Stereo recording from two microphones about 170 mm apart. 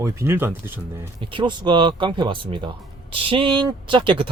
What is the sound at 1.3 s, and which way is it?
Speech, 25° right (ahead or behind).